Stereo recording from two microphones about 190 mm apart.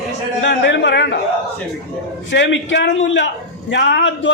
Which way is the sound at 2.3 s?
75° left (ahead or behind).